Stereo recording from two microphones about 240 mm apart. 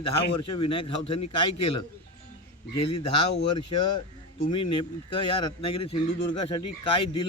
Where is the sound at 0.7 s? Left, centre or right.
Left.